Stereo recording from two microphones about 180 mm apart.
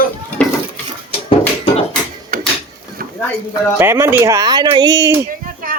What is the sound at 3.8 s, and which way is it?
Speech, 15° right (ahead or behind).